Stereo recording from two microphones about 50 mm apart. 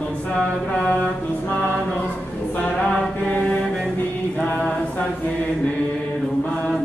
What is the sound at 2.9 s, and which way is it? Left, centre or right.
Mantra, left.